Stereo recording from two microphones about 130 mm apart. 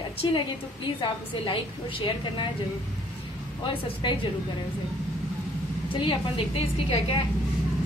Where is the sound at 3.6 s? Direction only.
40° left (ahead or behind).